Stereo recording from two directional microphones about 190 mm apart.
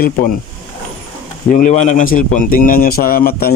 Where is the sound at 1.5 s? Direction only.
40° left (ahead or behind).